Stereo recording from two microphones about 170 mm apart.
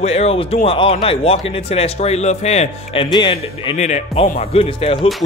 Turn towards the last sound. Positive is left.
turn(degrees=30)  # may be behind; listen again after turning